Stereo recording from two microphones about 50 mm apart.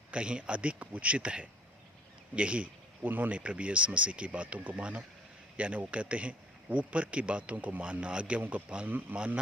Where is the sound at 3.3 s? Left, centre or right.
Right.